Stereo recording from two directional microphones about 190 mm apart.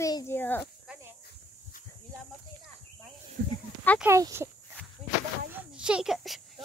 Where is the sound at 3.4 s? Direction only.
70° right (ahead or behind).